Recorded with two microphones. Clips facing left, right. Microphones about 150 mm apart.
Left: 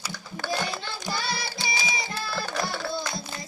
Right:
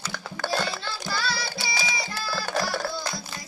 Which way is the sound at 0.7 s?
20° left (ahead or behind).